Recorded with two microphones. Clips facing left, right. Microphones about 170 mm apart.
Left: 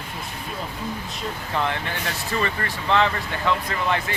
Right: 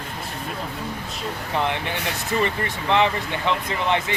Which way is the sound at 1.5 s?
20° right (ahead or behind).